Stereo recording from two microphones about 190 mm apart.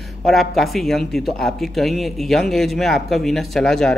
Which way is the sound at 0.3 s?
Centre (ahead or behind).